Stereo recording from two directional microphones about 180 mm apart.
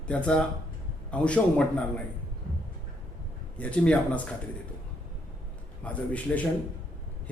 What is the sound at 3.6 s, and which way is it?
Speech, 5° left (ahead or behind).